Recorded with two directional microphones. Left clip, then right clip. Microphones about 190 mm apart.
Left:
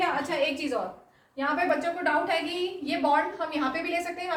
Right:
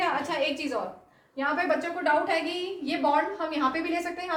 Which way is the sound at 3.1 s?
20° right (ahead or behind).